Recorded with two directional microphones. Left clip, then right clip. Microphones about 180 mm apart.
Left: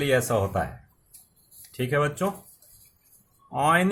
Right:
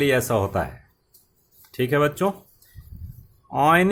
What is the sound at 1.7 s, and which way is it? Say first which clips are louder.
Speech: right 4 dB; 45° right (ahead or behind).